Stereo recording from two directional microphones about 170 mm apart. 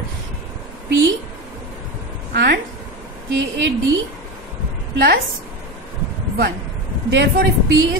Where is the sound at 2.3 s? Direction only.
70° right (ahead or behind).